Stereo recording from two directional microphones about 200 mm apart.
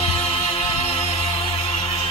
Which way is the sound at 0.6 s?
30° left (ahead or behind).